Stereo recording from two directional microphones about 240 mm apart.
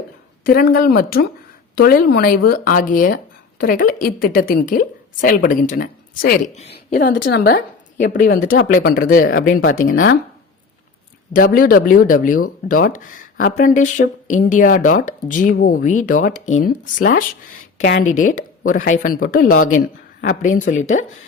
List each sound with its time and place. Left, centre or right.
0.4 s a woman's voice: left
7.1 s a woman's voice: left
11.3 s a woman's voice: left